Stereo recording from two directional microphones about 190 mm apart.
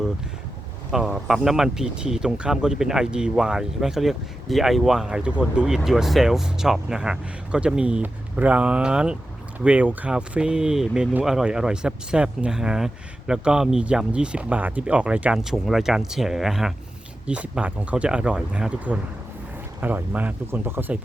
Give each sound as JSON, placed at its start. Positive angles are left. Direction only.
{"t": 0.9, "sound": "speech", "side_deg": 0}